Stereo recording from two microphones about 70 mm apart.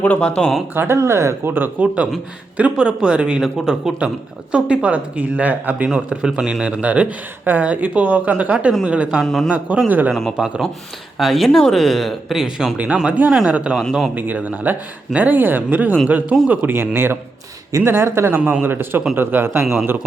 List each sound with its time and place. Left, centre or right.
0.0 s speech: centre
0.7 s a man's voice: right
0.9 s speech: right
1.5 s speech: right
2.6 s speech: centre
9.2 s speech: centre
9.5 s speech: centre
10.1 s speech: centre
10.3 s speech: centre
12.7 s a man's voice: centre